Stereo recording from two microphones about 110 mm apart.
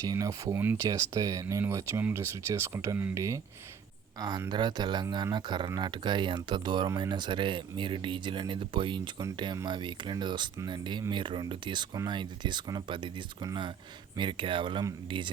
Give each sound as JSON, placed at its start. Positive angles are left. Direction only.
{"t": 0.0, "sound": "speech", "side_deg": -30}